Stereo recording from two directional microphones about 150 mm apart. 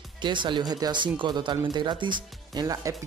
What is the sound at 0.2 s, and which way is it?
Speech, 30° right (ahead or behind).